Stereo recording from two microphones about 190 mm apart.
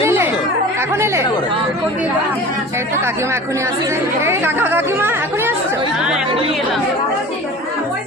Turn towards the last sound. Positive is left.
turn(degrees=-5)  # may be behind; listen again after turning